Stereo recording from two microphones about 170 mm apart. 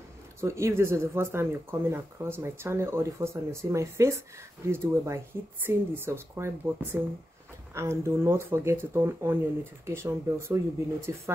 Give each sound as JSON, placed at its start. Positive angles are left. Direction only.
{"t": 0.4, "sound": "speech", "side_deg": -15}